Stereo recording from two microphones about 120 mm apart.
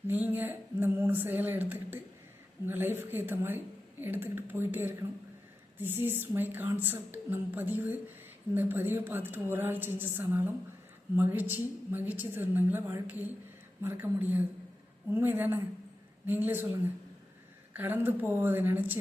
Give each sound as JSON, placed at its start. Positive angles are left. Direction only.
{"t": 0.1, "sound": "a woman's voice", "side_deg": -15}
{"t": 17.7, "sound": "a woman's voice", "side_deg": -15}